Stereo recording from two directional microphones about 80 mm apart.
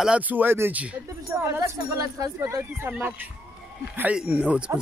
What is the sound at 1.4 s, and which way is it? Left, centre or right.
Speech, right.